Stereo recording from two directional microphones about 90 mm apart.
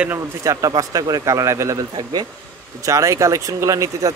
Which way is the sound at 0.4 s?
40° right (ahead or behind).